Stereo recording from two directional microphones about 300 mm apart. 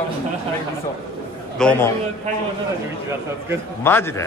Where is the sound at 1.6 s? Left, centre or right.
Centre.